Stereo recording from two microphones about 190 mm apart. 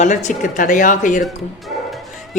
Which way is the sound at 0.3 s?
45° left (ahead or behind).